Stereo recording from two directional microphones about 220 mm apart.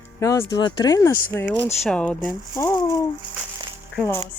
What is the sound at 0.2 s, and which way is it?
Speech, 15° left (ahead or behind).